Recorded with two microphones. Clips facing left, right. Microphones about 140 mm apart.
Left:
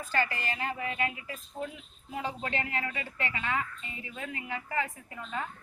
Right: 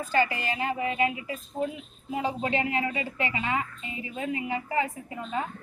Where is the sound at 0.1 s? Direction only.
15° right (ahead or behind).